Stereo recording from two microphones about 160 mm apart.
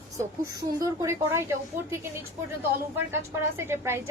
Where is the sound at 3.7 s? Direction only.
15° right (ahead or behind).